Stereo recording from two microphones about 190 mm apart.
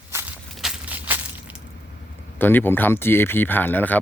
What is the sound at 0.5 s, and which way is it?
Crushing, 5° right (ahead or behind).